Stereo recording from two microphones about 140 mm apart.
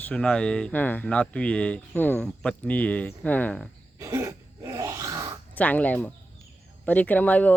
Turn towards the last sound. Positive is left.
turn(degrees=10)  # may be behind; listen again after turning